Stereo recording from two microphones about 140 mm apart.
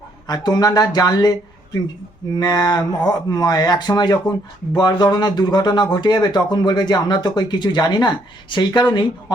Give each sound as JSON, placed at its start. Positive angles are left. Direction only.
{"t": 0.3, "sound": "speech", "side_deg": 30}